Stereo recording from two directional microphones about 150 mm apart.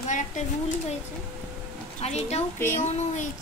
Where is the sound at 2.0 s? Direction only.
45° left (ahead or behind).